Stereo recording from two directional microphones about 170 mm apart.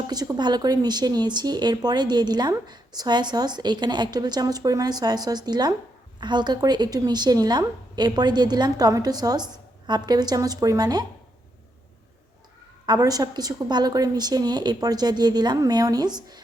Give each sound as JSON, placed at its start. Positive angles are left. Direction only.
{"t": 0.1, "sound": "speech", "side_deg": -20}
{"t": 12.8, "sound": "speech", "side_deg": -25}